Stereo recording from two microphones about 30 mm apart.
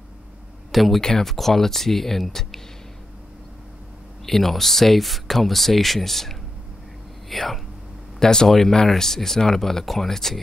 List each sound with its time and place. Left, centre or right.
0.7 s speech: centre
1.0 s speech: centre
4.3 s speech: centre
8.2 s speech: left
8.5 s speech: centre